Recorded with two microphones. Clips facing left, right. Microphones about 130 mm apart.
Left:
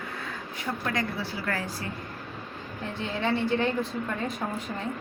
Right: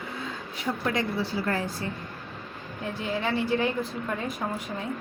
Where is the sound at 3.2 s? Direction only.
10° right (ahead or behind).